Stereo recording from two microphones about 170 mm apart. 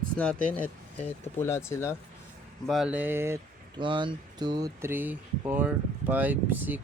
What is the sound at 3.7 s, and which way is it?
Speech, 30° right (ahead or behind).